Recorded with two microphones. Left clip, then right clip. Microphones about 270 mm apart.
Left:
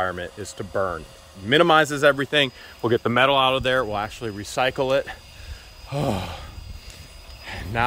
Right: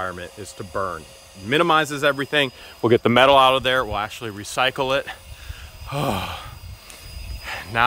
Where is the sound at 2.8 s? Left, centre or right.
Right.